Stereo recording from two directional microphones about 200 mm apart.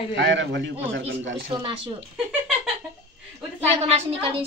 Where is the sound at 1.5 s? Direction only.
25° right (ahead or behind).